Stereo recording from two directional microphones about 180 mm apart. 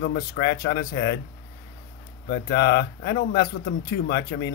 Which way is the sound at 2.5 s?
65° left (ahead or behind).